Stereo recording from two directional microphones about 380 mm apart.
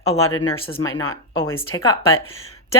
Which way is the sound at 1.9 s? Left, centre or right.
Centre.